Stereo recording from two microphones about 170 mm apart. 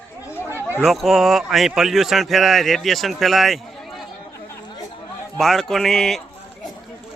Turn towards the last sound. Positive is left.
turn(degrees=5)  # may be behind; listen again after turning